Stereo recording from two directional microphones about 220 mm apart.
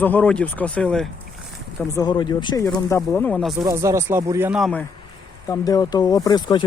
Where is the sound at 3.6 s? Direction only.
15° right (ahead or behind).